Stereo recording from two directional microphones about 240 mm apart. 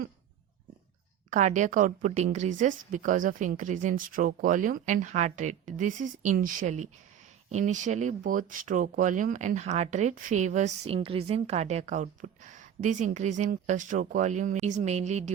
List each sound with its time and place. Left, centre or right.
1.3 s speech: right